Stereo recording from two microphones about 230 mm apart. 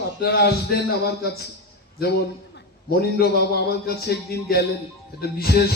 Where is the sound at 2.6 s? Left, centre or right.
Left.